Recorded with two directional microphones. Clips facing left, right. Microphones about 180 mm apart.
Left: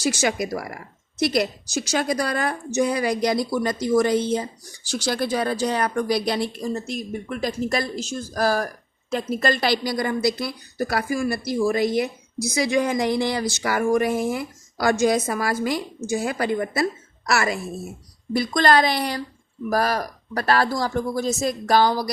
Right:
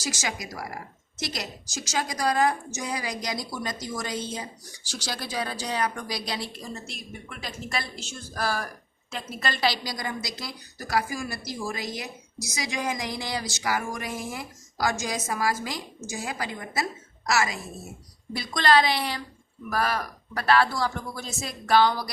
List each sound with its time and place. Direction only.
0.0 s a woman's voice: 60° left (ahead or behind)
6.7 s a woman's voice: 40° left (ahead or behind); by 17.6 s 60° left (ahead or behind)
18.3 s a woman's voice: 50° left (ahead or behind)